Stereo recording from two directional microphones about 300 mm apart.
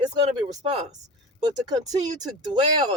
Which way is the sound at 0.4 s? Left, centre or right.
Centre.